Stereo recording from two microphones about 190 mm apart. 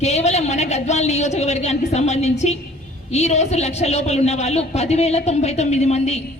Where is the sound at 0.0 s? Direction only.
35° left (ahead or behind).